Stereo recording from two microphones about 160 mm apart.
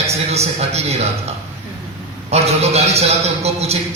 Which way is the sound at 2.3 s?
40° right (ahead or behind).